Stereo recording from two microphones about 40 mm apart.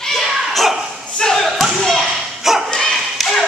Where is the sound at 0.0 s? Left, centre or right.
Centre.